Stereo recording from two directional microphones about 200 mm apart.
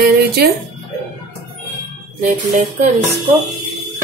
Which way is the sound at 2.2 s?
40° right (ahead or behind).